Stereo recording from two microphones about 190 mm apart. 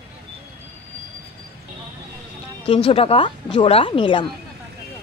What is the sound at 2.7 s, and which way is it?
A woman's voice, 30° left (ahead or behind).